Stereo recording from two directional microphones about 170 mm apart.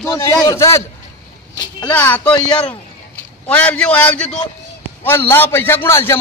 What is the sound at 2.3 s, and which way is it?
Speech, 25° left (ahead or behind).